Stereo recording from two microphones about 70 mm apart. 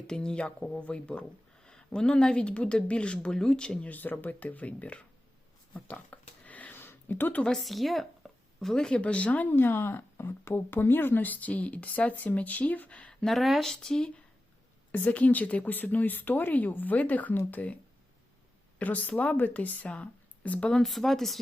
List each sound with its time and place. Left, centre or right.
0.1 s speech: centre
5.7 s a sound: left
7.4 s speech: centre
9.5 s speech: left; by 13.1 s centre
13.2 s speech: centre
14.9 s speech: left
18.8 s speech: left; by 21.4 s centre